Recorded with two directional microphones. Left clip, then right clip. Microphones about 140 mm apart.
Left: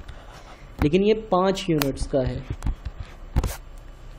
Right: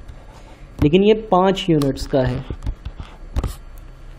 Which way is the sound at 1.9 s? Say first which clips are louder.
Right 5 dB; 45° right (ahead or behind).